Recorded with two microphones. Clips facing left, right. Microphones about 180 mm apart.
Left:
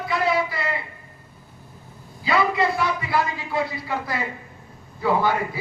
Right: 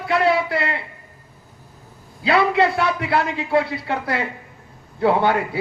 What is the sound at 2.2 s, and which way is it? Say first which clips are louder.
Speech: right 4 dB; 70° right (ahead or behind).